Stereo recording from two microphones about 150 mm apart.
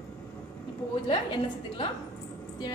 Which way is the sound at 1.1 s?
35° left (ahead or behind).